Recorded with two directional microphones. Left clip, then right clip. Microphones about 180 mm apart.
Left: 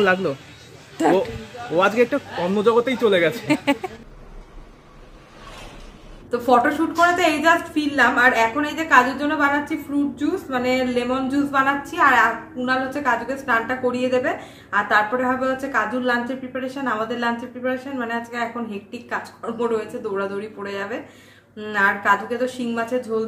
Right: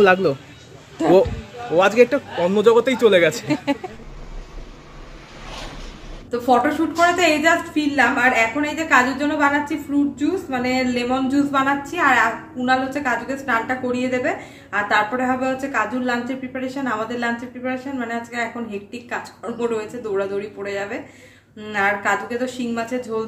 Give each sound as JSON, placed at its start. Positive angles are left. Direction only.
{"t": 0.0, "sound": "a man's voice", "side_deg": -45}
{"t": 1.0, "sound": "speech", "side_deg": 40}
{"t": 1.8, "sound": "a man's voice", "side_deg": -5}
{"t": 6.3, "sound": "a woman's voice", "side_deg": 0}